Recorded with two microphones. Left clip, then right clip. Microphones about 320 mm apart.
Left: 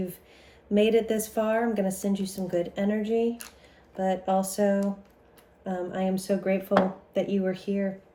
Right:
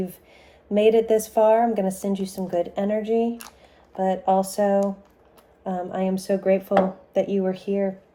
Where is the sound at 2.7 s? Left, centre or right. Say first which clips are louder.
Right 4 dB; centre.